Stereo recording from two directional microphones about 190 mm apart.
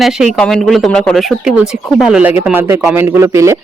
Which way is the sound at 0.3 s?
5° left (ahead or behind).